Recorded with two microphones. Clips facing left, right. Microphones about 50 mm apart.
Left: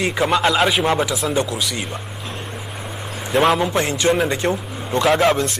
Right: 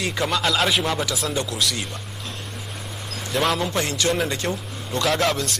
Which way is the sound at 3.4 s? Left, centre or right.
Centre.